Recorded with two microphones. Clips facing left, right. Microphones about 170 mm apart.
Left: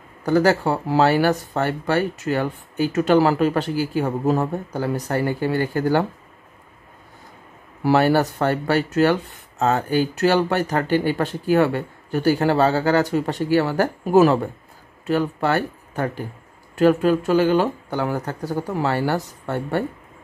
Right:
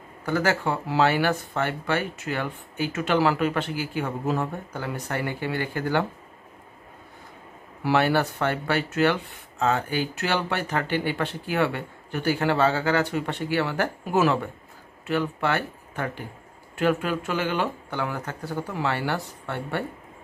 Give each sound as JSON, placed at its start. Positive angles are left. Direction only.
{"t": 0.2, "sound": "speech", "side_deg": 40}
{"t": 7.8, "sound": "speech", "side_deg": 40}